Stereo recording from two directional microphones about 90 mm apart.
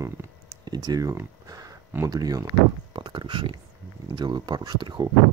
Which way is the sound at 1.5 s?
40° right (ahead or behind).